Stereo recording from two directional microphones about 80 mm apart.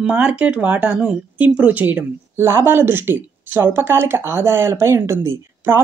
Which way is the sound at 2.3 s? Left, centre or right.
Right.